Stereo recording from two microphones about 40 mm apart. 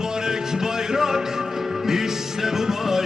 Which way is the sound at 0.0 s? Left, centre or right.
Centre.